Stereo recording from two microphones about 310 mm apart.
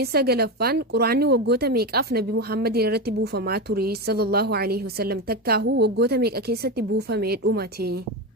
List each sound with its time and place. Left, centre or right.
0.0 s speech: right